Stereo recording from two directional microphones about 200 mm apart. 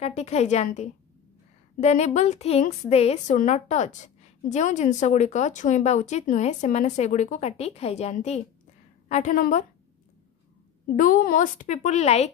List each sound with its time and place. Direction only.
0.0 s a woman's voice: 35° left (ahead or behind)
11.0 s a woman's voice: 45° left (ahead or behind)